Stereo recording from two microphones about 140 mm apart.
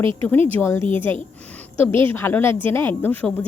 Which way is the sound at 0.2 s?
15° left (ahead or behind).